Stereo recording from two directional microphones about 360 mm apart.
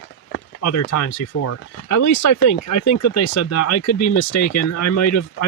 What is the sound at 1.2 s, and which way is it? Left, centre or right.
Speech, left.